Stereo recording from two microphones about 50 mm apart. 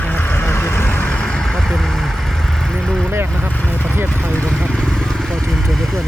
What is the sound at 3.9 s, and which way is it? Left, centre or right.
Speech, right.